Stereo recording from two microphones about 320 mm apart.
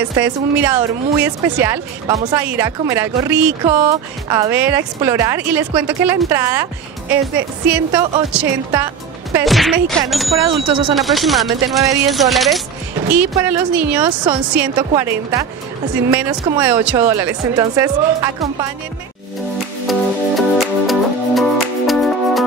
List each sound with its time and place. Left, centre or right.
0.0 s speech: centre
10.7 s speech: centre
11.0 s speech: centre
19.9 s music: centre